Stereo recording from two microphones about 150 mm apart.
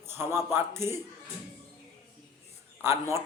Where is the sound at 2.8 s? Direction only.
15° right (ahead or behind).